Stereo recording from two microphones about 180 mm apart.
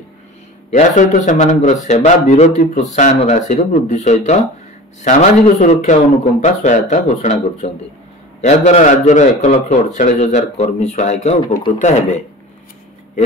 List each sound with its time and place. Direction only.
0.7 s a man's voice: 40° left (ahead or behind)